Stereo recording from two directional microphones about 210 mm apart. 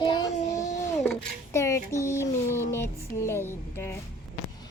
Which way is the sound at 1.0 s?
10° left (ahead or behind).